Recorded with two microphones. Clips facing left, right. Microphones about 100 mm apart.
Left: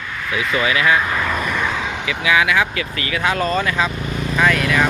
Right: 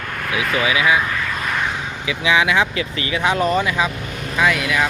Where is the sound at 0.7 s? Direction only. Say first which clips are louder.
Left 1 dB; 10° right (ahead or behind).